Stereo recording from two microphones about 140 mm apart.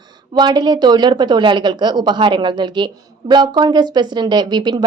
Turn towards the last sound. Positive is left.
turn(degrees=-30)  # may be behind; listen again after turning